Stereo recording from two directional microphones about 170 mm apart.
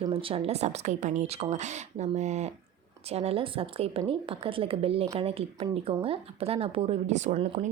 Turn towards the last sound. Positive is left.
turn(degrees=-40)  # may be behind; listen again after turning